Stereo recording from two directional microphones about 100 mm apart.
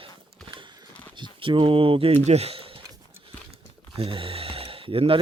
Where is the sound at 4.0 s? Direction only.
65° right (ahead or behind).